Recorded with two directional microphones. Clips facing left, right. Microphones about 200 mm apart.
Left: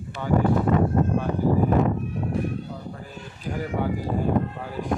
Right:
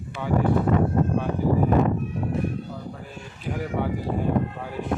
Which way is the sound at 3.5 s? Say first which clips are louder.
Even; centre (ahead or behind).